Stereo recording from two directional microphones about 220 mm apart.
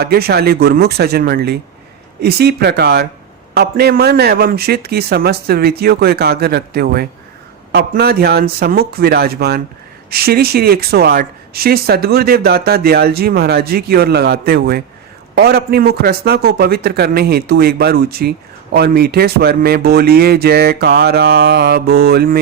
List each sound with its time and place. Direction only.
0.0 s a man's voice: 45° right (ahead or behind)